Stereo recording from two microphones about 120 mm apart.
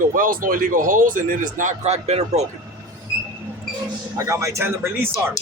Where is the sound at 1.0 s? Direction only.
90° right; by 2.5 s 65° right (ahead or behind).